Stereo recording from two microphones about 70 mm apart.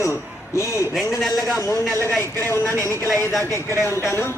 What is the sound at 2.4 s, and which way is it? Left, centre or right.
Speech, left.